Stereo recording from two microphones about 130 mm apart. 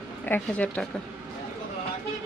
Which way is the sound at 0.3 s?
10° left (ahead or behind).